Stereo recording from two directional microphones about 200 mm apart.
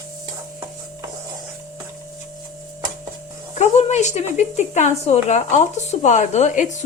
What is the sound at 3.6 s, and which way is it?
A woman's voice, 35° left (ahead or behind).